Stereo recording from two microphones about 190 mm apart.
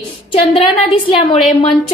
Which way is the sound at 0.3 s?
30° left (ahead or behind).